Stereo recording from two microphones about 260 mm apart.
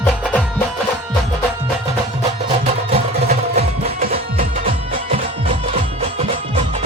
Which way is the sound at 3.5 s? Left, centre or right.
Right.